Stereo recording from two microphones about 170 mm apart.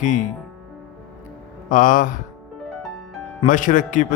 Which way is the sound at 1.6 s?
50° left (ahead or behind).